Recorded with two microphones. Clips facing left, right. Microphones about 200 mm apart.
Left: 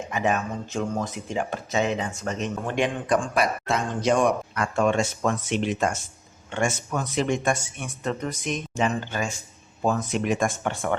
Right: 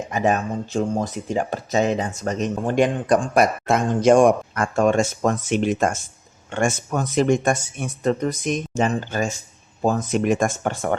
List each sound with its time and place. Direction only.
0.1 s speech: 40° right (ahead or behind)